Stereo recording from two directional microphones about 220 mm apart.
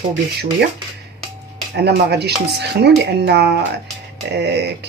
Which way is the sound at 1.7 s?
50° right (ahead or behind).